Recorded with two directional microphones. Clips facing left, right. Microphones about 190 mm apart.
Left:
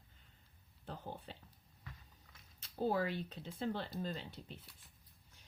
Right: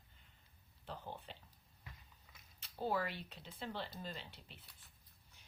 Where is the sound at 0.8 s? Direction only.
50° left (ahead or behind).